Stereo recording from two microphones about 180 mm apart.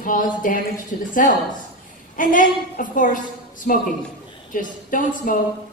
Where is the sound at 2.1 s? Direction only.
45° left (ahead or behind).